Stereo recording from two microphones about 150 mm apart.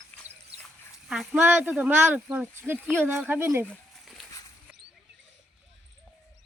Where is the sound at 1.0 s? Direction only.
5° right (ahead or behind).